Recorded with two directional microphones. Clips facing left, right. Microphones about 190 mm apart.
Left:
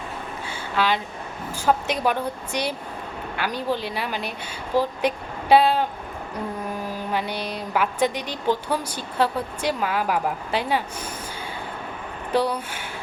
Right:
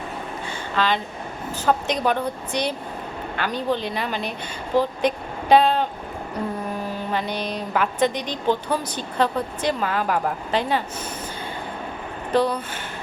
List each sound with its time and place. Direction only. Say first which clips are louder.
0.4 s a sound: even; 10° left (ahead or behind)
1.5 s a woman's voice: even; 10° left (ahead or behind)
7.1 s a woman's voice: right 1 dB; 10° left (ahead or behind)
12.3 s a woman's voice: right 2 dB; 10° left (ahead or behind)